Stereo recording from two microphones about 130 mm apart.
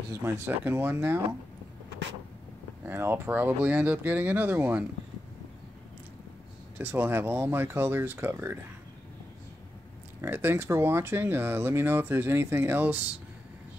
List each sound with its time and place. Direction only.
0.1 s speech: 20° right (ahead or behind)
2.8 s speech: 15° right (ahead or behind)
6.8 s speech: 15° right (ahead or behind)
10.2 s speech: 15° right (ahead or behind)